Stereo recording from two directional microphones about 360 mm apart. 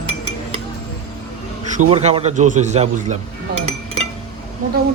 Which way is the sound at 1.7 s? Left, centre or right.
Centre.